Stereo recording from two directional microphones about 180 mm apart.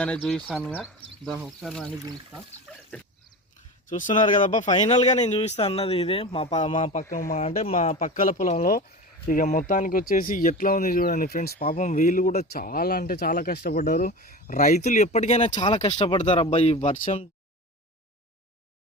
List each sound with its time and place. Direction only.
0.0 s speech: 5° left (ahead or behind)
3.8 s speech: 45° left (ahead or behind)
7.1 s speech: 50° left (ahead or behind)
7.3 s speech: 35° left (ahead or behind); by 11.8 s 60° left (ahead or behind)
11.8 s speech: 40° left (ahead or behind)
12.5 s speech: 55° left (ahead or behind); by 15.8 s 25° left (ahead or behind)
15.8 s speech: 40° left (ahead or behind)
16.0 s speech: 25° left (ahead or behind)
16.5 s speech: 40° left (ahead or behind)